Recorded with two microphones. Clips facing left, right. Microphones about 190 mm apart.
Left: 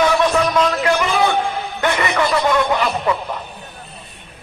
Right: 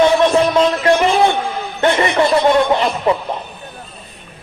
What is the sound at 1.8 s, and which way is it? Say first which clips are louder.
Speech: right 5 dB; 30° right (ahead or behind).